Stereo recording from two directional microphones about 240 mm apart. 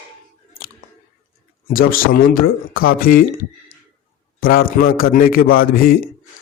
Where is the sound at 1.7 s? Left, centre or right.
Left.